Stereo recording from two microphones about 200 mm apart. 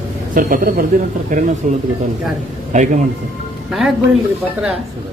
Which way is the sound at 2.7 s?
40° right (ahead or behind).